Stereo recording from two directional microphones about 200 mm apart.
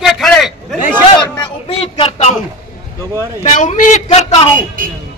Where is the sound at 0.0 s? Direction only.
Centre (ahead or behind).